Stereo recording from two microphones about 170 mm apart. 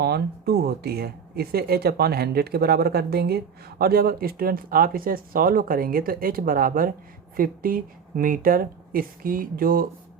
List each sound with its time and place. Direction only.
0.0 s speech: 70° right (ahead or behind)